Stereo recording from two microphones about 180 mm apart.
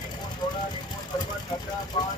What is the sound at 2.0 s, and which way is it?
Speech, 25° left (ahead or behind).